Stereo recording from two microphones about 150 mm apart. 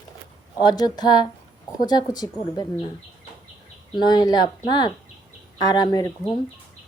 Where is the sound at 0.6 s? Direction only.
30° left (ahead or behind).